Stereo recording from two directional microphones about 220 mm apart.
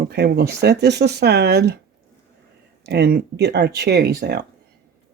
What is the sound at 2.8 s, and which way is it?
Speech, 50° right (ahead or behind).